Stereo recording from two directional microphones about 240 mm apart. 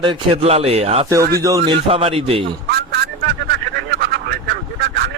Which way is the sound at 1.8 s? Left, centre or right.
Right.